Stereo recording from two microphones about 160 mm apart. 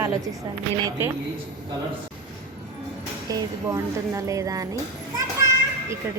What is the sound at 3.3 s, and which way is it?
A woman's voice, 20° right (ahead or behind).